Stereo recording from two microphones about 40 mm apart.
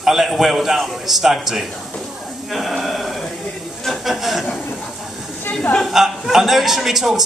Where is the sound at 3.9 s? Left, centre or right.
Centre.